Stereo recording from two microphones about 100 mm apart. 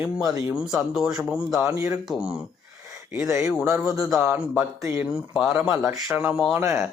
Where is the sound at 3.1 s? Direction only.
25° right (ahead or behind).